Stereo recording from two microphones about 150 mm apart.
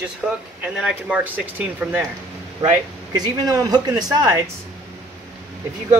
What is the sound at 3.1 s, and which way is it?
Speech, 25° right (ahead or behind).